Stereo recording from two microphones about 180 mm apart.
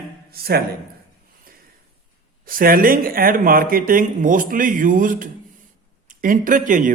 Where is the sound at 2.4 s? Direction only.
50° right (ahead or behind).